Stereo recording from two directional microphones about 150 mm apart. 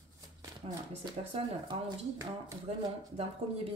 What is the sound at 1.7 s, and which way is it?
Speech, 20° right (ahead or behind).